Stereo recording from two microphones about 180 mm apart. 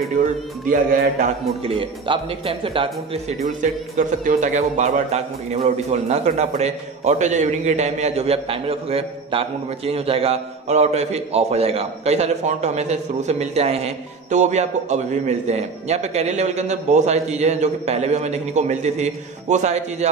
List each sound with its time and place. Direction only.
0.7 s a man's voice: 55° right (ahead or behind); by 3.3 s 30° right (ahead or behind)
3.4 s a man's voice: 50° right (ahead or behind)